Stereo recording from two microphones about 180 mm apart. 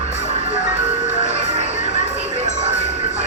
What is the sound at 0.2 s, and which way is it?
Music, 40° right (ahead or behind).